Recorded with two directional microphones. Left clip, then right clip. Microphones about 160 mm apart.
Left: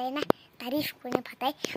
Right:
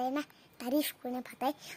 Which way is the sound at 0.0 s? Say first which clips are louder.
Left 7 dB; 20° right (ahead or behind).